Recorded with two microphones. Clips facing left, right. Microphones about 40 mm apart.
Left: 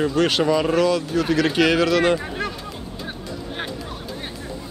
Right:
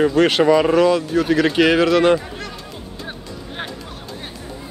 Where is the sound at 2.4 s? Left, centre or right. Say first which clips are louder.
Left 5 dB; centre.